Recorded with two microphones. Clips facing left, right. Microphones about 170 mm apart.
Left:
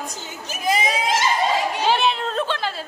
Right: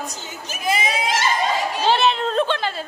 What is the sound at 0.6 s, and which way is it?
Speech, 40° left (ahead or behind).